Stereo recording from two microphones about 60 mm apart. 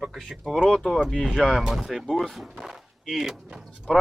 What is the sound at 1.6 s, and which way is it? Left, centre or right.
Speech, centre.